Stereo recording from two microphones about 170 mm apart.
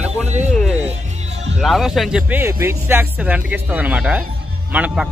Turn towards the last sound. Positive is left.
turn(degrees=-10)  # may be behind; listen again after turning